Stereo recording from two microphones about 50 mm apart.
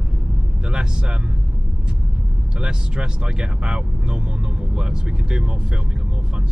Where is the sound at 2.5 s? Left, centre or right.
Centre.